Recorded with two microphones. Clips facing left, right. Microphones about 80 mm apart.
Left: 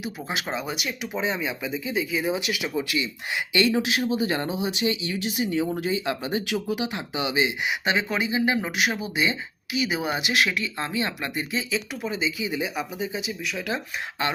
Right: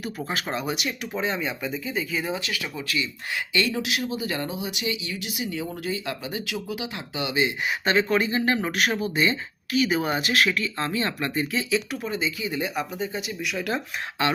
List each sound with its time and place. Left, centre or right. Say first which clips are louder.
0.3 s speech: right 1 dB; centre
2.3 s speech: left 4 dB; centre